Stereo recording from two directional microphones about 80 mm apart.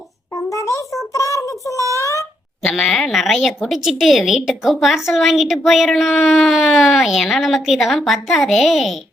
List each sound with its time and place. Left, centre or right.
1.1 s child singing: left
2.6 s a woman's voice: centre